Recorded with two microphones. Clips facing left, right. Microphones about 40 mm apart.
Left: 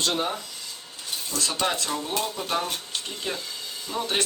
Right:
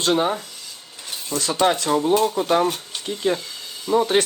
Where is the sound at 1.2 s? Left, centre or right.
Right.